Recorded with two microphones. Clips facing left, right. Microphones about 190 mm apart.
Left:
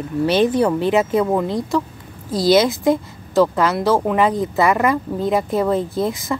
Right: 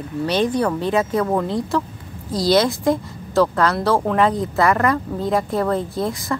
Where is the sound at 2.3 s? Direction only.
20° left (ahead or behind).